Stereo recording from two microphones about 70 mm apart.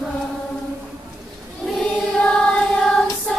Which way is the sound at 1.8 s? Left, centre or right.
Centre.